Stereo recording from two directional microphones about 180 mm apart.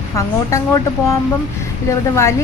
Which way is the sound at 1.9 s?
15° left (ahead or behind).